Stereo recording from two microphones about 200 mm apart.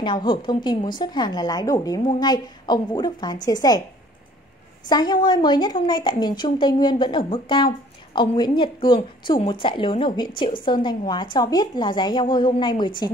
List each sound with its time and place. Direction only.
0.0 s a woman's voice: 25° left (ahead or behind)
4.8 s a woman's voice: 20° left (ahead or behind)